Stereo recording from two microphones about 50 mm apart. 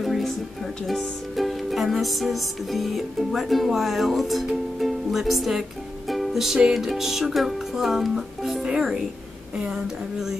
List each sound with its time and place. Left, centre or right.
0.0 s music: centre
4.7 s speech: centre
6.7 s music: centre
8.6 s speech: centre